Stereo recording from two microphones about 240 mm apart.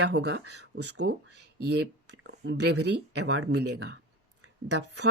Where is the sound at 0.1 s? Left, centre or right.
Right.